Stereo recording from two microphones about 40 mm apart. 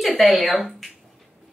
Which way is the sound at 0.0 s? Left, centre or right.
Centre.